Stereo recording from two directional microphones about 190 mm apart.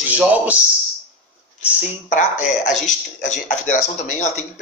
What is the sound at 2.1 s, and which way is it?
Speech, 40° left (ahead or behind).